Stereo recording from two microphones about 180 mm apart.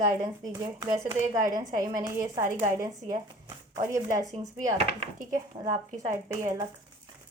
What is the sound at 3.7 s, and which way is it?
Speech, 15° right (ahead or behind).